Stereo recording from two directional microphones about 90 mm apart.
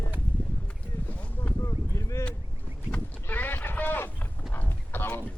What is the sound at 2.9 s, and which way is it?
Livestock, 20° left (ahead or behind).